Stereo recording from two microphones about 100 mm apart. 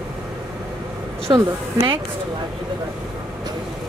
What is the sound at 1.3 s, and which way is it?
Speech, 45° right (ahead or behind).